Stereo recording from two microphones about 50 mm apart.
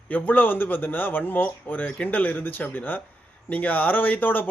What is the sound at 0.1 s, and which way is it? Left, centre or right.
Speech, left.